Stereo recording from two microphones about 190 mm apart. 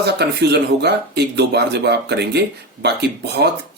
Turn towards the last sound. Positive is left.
turn(degrees=-65)  # may be behind; listen again after turning